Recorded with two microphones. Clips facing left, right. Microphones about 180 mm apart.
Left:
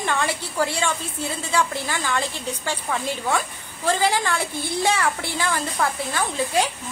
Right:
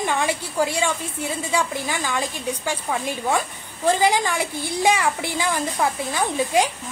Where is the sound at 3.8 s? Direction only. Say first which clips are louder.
Right 3 dB; 15° right (ahead or behind).